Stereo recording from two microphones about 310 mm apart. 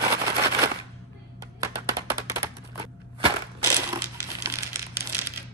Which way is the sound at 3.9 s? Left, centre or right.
Centre.